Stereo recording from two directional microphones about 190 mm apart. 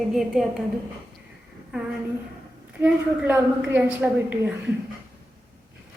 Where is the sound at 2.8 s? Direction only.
10° right (ahead or behind).